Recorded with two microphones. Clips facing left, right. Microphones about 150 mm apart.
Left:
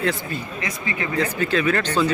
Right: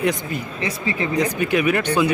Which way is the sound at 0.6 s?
30° right (ahead or behind).